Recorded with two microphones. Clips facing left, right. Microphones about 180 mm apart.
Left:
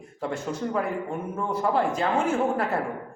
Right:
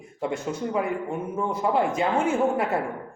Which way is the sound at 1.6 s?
10° right (ahead or behind).